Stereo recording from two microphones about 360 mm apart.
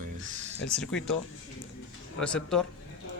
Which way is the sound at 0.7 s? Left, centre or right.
Centre.